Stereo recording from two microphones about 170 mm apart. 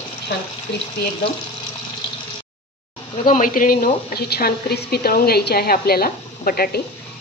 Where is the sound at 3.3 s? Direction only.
55° left (ahead or behind).